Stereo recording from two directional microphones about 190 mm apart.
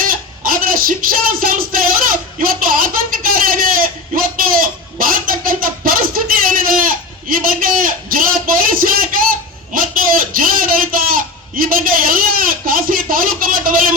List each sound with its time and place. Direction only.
0.0 s music: 50° right (ahead or behind)